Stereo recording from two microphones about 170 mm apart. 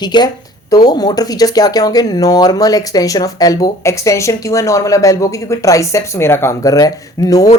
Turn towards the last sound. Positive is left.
turn(degrees=20)  # may be behind; listen again after turning